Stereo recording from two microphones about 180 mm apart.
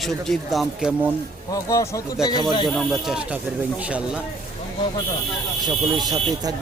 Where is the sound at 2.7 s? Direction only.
Centre (ahead or behind).